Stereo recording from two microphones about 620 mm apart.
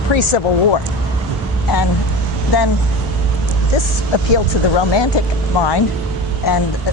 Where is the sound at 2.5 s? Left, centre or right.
Left.